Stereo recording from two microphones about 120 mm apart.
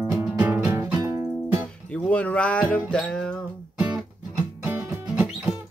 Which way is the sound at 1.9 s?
10° left (ahead or behind).